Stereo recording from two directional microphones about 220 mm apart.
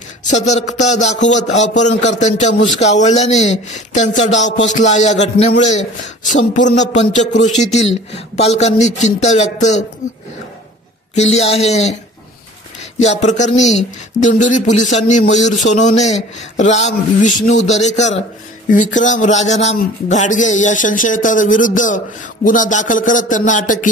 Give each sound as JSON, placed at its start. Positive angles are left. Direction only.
{"t": 0.3, "sound": "a man's voice", "side_deg": 30}
{"t": 11.1, "sound": "speech", "side_deg": 30}
{"t": 13.0, "sound": "a man's voice", "side_deg": 30}